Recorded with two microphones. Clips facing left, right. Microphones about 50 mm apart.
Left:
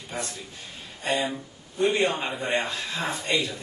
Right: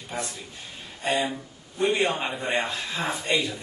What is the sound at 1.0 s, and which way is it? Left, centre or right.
Speech, centre.